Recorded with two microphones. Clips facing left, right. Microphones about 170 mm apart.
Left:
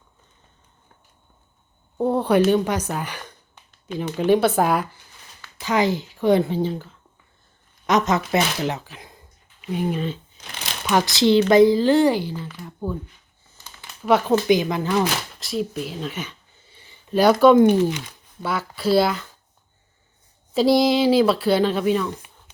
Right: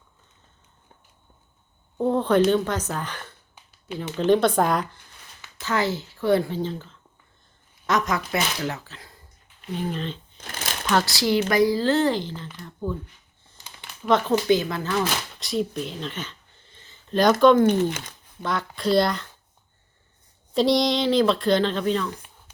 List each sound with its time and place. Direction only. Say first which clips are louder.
2.0 s speech: left 1 dB; 10° left (ahead or behind)
7.9 s speech: left 4 dB; 20° left (ahead or behind)
10.3 s shuffling cards: right 2 dB; 45° right (ahead or behind)
10.8 s speech: left 4 dB; 15° left (ahead or behind)
15.4 s a sound: even; centre (ahead or behind)
17.4 s speech: left 3 dB; 10° left (ahead or behind)
20.5 s speech: left 3 dB; 5° left (ahead or behind)